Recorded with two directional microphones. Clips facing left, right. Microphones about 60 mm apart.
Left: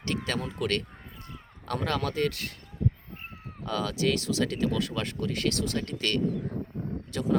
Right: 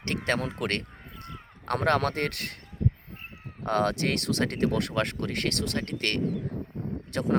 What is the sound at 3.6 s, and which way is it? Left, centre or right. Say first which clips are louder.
Speech: right 2 dB; right.